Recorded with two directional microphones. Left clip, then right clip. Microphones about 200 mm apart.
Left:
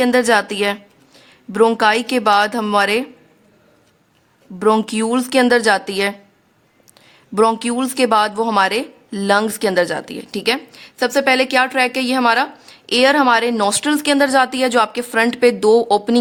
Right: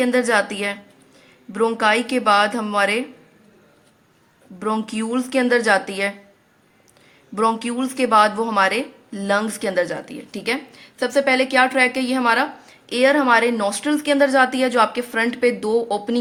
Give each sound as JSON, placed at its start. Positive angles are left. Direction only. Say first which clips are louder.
{"t": 0.0, "sound": "speech", "louder": "left 4 dB", "side_deg": 45}
{"t": 4.6, "sound": "speech", "louder": "left 8 dB", "side_deg": 45}
{"t": 7.3, "sound": "speech", "louder": "left 5 dB", "side_deg": 45}